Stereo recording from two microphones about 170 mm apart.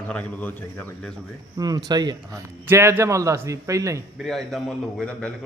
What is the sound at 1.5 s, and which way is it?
A man's voice, 25° right (ahead or behind).